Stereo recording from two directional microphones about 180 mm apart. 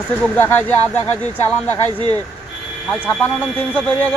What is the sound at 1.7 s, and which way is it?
Speech, 25° right (ahead or behind).